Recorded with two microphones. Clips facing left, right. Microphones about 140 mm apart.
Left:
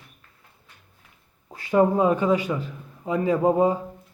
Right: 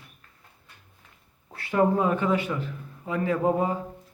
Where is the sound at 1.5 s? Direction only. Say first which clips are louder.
Left 3 dB; 15° left (ahead or behind).